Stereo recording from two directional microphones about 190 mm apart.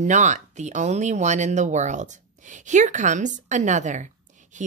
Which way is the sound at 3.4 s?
40° right (ahead or behind).